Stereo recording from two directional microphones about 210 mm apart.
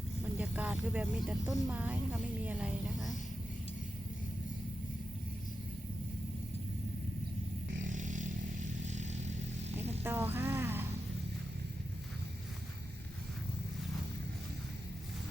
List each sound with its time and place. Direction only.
0.3 s vehicle: 5° right (ahead or behind)
1.3 s speech: 5° right (ahead or behind)
2.4 s a sound: 5° right (ahead or behind)
7.8 s vehicle: 35° right (ahead or behind)
10.0 s music: 10° right (ahead or behind)